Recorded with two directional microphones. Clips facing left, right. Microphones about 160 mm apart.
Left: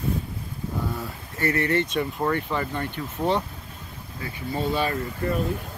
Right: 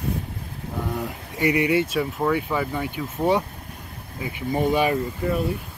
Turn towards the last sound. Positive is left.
turn(degrees=-10)  # may be behind; listen again after turning